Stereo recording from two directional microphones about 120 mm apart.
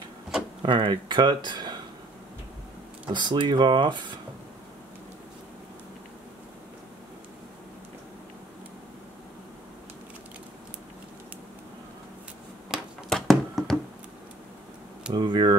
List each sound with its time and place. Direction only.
0.6 s speech: 40° right (ahead or behind)
3.1 s speech: 40° right (ahead or behind)
12.7 s a sound: centre (ahead or behind)
15.1 s speech: 40° right (ahead or behind)